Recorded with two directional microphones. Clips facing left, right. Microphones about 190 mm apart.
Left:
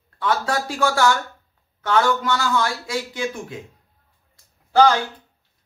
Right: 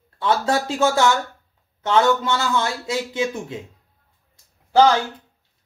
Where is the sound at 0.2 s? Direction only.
25° right (ahead or behind).